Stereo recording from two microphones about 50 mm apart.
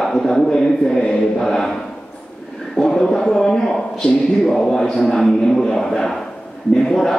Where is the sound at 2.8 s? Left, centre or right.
Centre.